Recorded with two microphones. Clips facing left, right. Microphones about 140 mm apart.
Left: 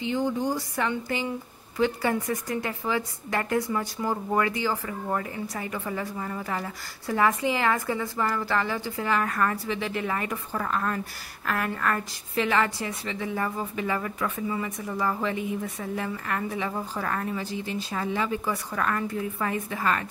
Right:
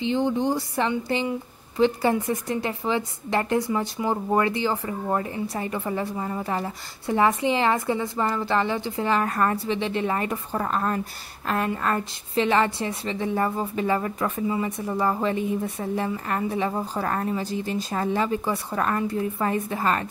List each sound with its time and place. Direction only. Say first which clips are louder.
0.0 s a woman's voice: right 3 dB; 25° right (ahead or behind)